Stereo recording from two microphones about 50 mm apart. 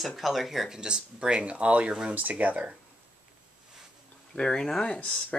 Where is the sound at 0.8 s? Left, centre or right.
Centre.